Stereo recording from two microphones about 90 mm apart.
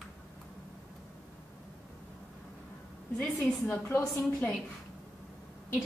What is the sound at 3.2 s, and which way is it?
A woman's voice, 20° left (ahead or behind).